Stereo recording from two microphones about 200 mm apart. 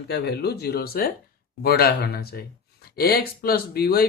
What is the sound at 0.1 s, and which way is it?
Speech, 55° left (ahead or behind).